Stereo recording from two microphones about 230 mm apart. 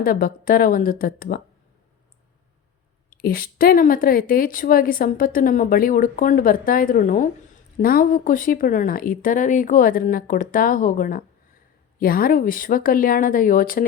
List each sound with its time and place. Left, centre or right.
0.0 s a woman's voice: left
3.1 s a woman's voice: left